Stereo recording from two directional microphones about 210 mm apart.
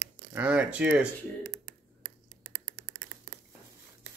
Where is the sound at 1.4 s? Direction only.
60° right (ahead or behind).